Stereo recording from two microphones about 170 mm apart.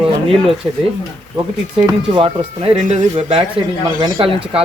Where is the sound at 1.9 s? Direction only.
30° right (ahead or behind).